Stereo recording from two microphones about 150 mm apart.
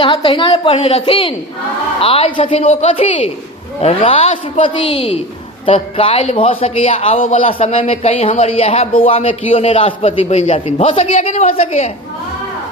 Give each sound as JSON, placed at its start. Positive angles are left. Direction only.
{"t": 0.0, "sound": "a man's voice", "side_deg": 35}